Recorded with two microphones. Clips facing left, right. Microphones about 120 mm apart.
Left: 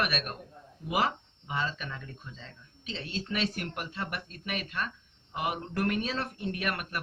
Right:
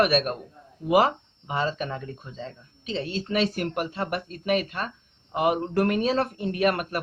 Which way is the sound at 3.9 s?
50° right (ahead or behind).